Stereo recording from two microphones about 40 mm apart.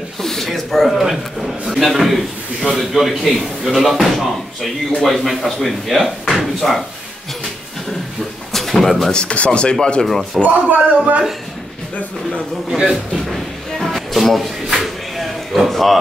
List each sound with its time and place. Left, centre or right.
0.2 s a man's voice: centre
8.5 s speech: centre
9.1 s speech: left
10.0 s speech: centre
10.4 s a man's voice: right
12.6 s a man's voice: centre
13.3 s a sound: centre